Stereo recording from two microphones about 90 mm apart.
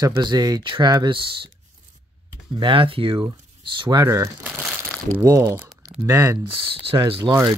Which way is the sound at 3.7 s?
60° right (ahead or behind).